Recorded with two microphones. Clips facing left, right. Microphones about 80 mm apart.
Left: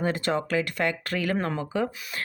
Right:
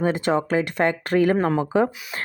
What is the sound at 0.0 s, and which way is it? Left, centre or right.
Speech, centre.